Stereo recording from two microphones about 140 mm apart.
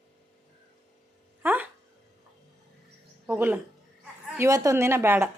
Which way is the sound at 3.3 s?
15° right (ahead or behind).